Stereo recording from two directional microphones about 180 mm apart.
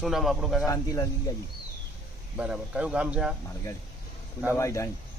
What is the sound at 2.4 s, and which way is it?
Speech, 5° right (ahead or behind).